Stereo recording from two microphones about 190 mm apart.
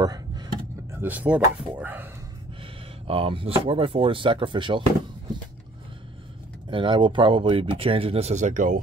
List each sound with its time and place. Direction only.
0.0 s a sound: 20° right (ahead or behind)
0.9 s speech: 10° right (ahead or behind)
2.6 s speech: 30° right (ahead or behind)
6.7 s speech: 25° right (ahead or behind)